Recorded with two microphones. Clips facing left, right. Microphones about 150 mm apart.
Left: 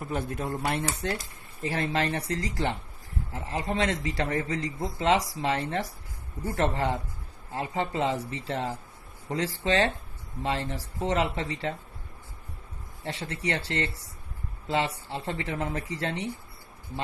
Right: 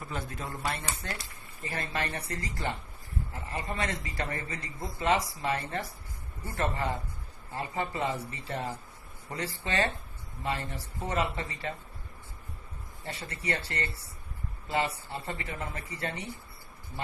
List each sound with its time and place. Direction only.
0.1 s speech: 55° left (ahead or behind)
1.0 s speech: 45° left (ahead or behind)
1.6 s speech: 90° left
7.9 s speech: 90° left
13.0 s speech: 90° left